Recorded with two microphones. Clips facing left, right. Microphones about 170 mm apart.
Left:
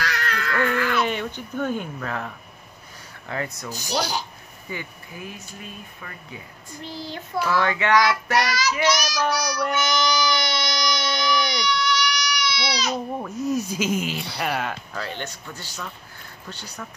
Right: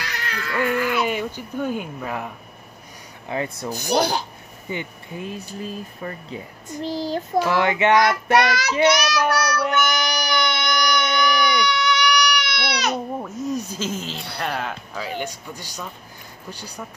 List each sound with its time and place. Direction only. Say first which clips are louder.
0.0 s cat: left 3 dB; 15° right (ahead or behind)
3.3 s child singing: right 4 dB; 25° right (ahead or behind)
3.7 s speech: right 6 dB; 55° right (ahead or behind)
4.6 s speech: right 5 dB; 25° right (ahead or behind)
7.5 s child singing: right 2 dB; 20° right (ahead or behind)
8.4 s speech: right 5 dB; 60° right (ahead or behind)
9.9 s baby cry: left 1 dB; 60° right (ahead or behind)
13.2 s speech: left 1 dB; 5° left (ahead or behind)